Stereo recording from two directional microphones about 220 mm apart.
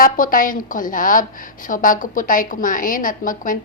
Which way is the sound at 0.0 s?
40° left (ahead or behind).